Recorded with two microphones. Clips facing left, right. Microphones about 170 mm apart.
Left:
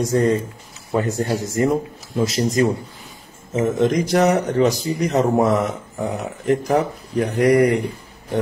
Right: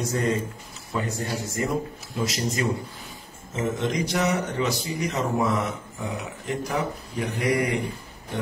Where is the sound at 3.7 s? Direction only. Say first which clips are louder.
Left 10 dB; 45° left (ahead or behind).